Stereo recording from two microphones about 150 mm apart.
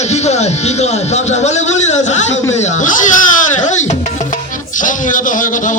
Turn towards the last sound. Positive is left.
turn(degrees=60)  # may be behind; listen again after turning